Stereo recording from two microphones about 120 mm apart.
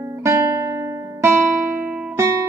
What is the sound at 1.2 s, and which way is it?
Music, 20° right (ahead or behind).